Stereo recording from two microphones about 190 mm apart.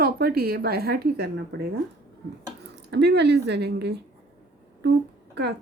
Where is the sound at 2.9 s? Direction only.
60° right (ahead or behind).